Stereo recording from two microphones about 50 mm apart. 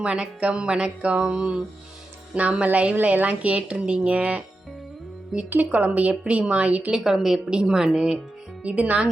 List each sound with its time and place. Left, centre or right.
0.0 s speech: right
5.3 s speech: centre
5.7 s speech: right
6.9 s speech: centre
8.6 s speech: right